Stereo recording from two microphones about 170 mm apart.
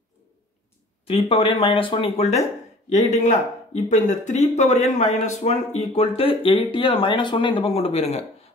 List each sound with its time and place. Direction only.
1.0 s speech: 35° left (ahead or behind)